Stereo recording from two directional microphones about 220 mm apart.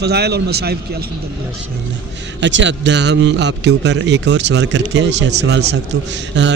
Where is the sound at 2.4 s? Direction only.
55° right (ahead or behind).